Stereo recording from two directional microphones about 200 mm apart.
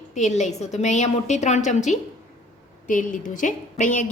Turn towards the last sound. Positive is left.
turn(degrees=40)  # may be behind; listen again after turning